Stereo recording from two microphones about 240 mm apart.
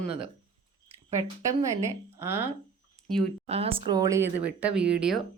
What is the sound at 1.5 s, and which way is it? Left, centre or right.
Speech, centre.